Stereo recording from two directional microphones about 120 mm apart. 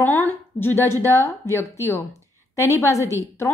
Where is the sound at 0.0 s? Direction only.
15° left (ahead or behind).